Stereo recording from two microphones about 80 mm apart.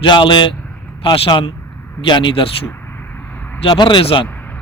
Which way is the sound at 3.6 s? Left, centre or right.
Left.